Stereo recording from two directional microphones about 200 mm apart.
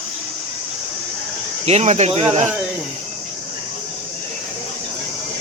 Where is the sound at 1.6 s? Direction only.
35° right (ahead or behind).